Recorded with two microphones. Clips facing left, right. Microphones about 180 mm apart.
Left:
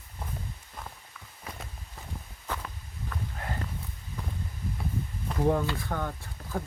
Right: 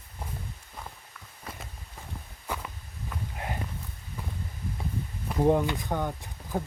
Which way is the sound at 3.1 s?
15° right (ahead or behind).